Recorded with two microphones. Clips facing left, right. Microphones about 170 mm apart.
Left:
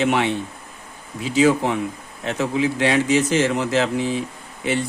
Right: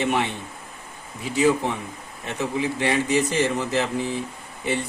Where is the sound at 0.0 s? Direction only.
90° left.